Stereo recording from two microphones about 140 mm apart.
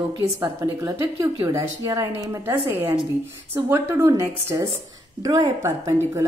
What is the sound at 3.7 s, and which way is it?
A woman's voice, 20° right (ahead or behind).